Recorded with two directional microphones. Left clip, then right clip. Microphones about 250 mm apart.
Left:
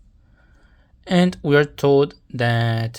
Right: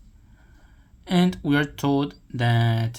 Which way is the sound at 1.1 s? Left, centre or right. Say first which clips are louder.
Left 5 dB; left.